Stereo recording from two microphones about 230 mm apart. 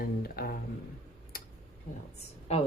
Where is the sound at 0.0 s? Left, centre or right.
Left.